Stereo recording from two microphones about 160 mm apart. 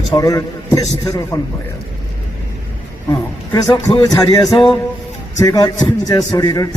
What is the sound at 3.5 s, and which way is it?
A man's voice, 25° left (ahead or behind).